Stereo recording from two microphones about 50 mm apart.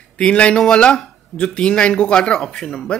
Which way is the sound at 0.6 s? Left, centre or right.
Centre.